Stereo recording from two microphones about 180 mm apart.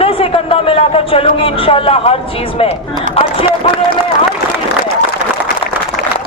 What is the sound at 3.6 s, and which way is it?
Speech, 30° left (ahead or behind).